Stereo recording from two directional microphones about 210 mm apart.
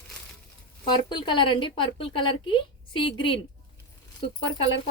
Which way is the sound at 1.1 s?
25° left (ahead or behind).